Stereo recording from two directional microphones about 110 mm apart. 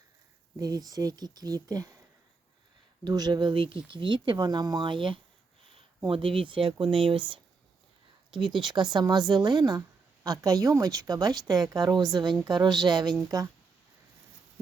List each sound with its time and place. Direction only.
0.6 s a woman's voice: 35° right (ahead or behind)
3.0 s speech: 40° right (ahead or behind)
8.5 s a woman's voice: 45° right (ahead or behind)